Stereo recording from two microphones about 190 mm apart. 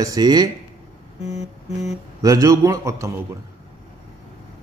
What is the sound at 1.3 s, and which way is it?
Music, 35° left (ahead or behind).